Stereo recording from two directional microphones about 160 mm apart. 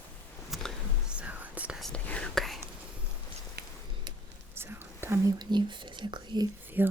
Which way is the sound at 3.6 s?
80° right.